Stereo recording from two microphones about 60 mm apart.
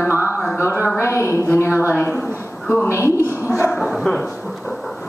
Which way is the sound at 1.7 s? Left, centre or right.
Right.